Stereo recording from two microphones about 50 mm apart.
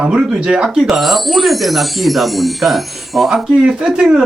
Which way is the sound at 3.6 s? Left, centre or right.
Centre.